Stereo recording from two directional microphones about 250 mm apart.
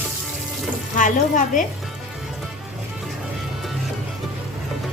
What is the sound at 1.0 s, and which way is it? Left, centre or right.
Speech, left.